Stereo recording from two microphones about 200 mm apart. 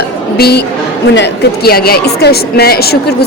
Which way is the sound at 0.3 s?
50° left (ahead or behind).